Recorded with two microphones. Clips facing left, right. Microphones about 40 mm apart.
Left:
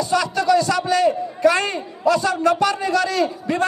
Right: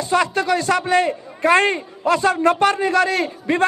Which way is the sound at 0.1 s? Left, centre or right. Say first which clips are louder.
Even; right.